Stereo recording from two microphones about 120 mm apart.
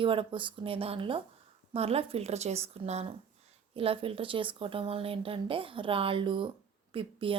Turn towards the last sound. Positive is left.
turn(degrees=-50)  # may be behind; listen again after turning